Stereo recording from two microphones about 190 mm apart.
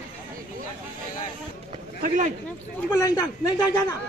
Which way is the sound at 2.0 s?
45° right (ahead or behind).